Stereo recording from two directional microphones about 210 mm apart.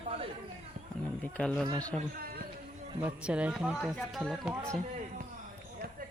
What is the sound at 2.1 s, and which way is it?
Music, 45° right (ahead or behind).